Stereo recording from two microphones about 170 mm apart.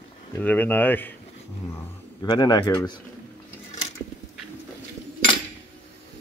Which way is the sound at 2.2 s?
25° left (ahead or behind).